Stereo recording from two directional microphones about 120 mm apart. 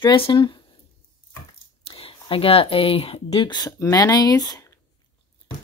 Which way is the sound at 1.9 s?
50° left (ahead or behind).